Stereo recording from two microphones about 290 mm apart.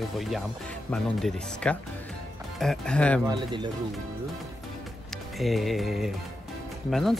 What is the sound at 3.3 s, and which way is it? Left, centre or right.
Speech, centre.